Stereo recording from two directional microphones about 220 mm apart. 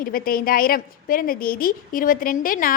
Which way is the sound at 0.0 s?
40° left (ahead or behind).